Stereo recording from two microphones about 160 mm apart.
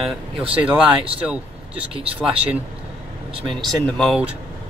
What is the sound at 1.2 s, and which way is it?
Speech, 5° right (ahead or behind).